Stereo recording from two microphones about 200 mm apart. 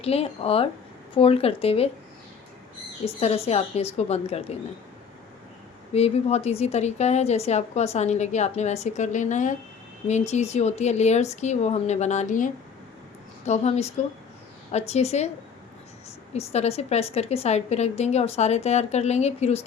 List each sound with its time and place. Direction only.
0.0 s speech: 30° left (ahead or behind)
3.0 s a woman's voice: 30° left (ahead or behind)
5.9 s a woman's voice: 30° left (ahead or behind)
16.3 s a woman's voice: 30° left (ahead or behind)